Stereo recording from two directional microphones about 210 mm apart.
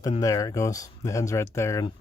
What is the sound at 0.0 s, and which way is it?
Speech, 15° left (ahead or behind).